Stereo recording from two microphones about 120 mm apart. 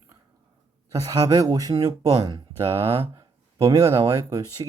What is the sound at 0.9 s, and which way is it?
Speech, 30° right (ahead or behind).